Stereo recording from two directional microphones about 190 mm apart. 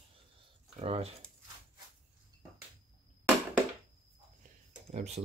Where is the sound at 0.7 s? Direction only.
30° right (ahead or behind).